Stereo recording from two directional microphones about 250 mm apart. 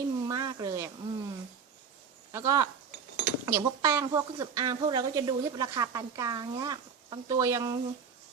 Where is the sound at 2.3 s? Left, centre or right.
Centre.